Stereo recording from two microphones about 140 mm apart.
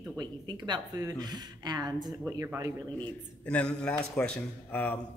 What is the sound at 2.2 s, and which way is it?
Speech, 15° right (ahead or behind).